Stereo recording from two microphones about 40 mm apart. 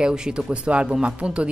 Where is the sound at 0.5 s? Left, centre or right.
Right.